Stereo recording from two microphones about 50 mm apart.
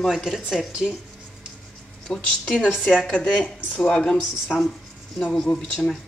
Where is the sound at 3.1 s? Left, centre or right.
Left.